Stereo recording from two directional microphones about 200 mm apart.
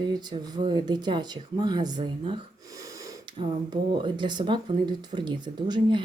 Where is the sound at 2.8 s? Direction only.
15° right (ahead or behind).